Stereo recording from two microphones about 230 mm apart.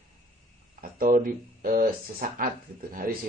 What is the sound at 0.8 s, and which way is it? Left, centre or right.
Speech, right.